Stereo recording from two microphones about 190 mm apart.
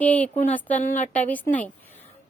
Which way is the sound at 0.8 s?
40° left (ahead or behind).